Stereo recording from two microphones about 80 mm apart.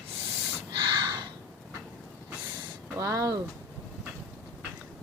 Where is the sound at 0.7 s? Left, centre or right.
Right.